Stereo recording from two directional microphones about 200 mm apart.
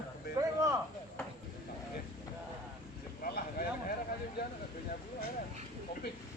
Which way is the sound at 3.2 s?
50° left (ahead or behind).